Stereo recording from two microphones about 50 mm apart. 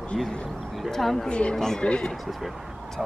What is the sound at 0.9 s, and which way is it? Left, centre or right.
Speech, centre.